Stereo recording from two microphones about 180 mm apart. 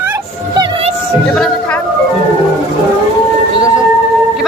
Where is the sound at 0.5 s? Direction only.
25° right (ahead or behind).